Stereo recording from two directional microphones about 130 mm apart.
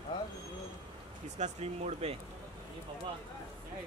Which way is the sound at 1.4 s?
55° right (ahead or behind).